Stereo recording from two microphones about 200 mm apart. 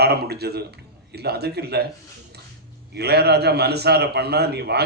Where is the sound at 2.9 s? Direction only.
55° right (ahead or behind).